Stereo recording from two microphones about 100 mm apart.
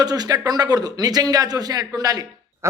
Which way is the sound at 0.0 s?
40° right (ahead or behind).